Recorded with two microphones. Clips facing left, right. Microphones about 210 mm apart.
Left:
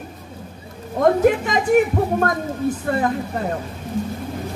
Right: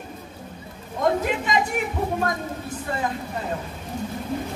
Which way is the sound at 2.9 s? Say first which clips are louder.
Left 7 dB; 55° left (ahead or behind).